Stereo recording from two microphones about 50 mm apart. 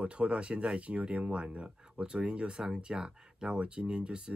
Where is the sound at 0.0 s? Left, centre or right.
Right.